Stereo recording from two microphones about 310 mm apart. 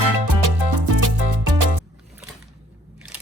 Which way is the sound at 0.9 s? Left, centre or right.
Right.